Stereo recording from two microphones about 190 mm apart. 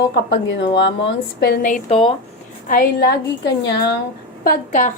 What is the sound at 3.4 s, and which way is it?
Speech, 60° left (ahead or behind).